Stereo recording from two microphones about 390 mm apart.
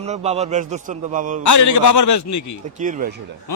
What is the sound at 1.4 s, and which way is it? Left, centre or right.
Speech, left.